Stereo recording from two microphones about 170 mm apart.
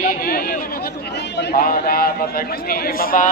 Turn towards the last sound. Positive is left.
turn(degrees=55)  # may be behind; listen again after turning